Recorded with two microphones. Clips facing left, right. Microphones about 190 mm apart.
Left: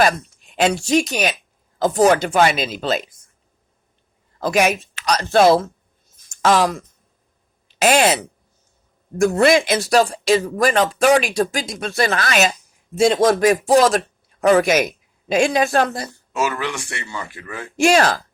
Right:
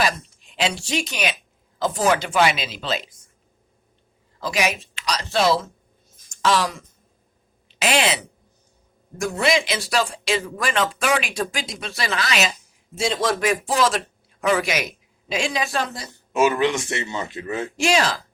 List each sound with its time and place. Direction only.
0.5 s speech: 50° left (ahead or behind)
4.4 s speech: 50° left (ahead or behind)
6.2 s a sound: 50° left (ahead or behind)
7.8 s speech: 50° left (ahead or behind)
16.0 s speech: 20° right (ahead or behind)
17.7 s speech: 50° left (ahead or behind)